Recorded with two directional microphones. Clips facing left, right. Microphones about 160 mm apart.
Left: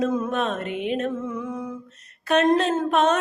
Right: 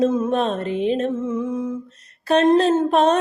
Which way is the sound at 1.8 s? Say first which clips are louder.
Right 4 dB; 35° right (ahead or behind).